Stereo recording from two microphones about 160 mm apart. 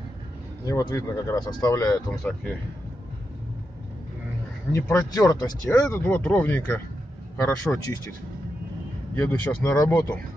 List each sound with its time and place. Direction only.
0.7 s speech: 20° left (ahead or behind)
2.0 s speech: 5° left (ahead or behind)
4.7 s speech: 20° left (ahead or behind)
6.0 s speech: 10° left (ahead or behind)
9.1 s speech: 15° left (ahead or behind)